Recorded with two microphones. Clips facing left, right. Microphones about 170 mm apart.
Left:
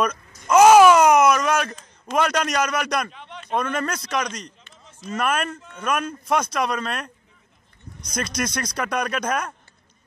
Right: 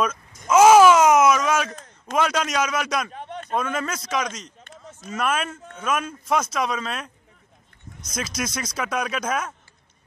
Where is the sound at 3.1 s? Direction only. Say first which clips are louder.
Right 6 dB; 45° right (ahead or behind).